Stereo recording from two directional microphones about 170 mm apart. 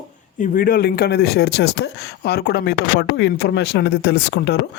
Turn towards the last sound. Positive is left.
turn(degrees=90)